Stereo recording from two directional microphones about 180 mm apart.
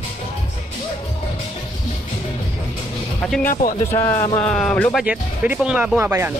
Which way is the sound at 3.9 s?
15° left (ahead or behind).